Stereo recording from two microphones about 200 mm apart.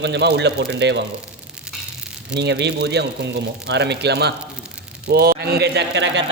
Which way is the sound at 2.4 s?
60° right (ahead or behind).